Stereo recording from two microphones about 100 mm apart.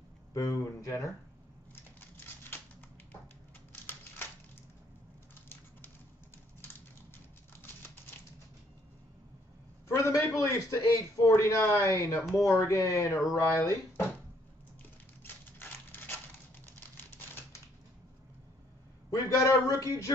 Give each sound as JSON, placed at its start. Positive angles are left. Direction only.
{"t": 0.3, "sound": "speech", "side_deg": 35}
{"t": 2.5, "sound": "typewriter", "side_deg": 20}
{"t": 9.8, "sound": "a man's voice", "side_deg": 30}
{"t": 15.2, "sound": "typewriter", "side_deg": 20}
{"t": 19.0, "sound": "a sound", "side_deg": 30}